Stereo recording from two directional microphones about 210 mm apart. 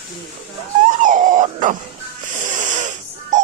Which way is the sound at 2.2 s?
35° right (ahead or behind).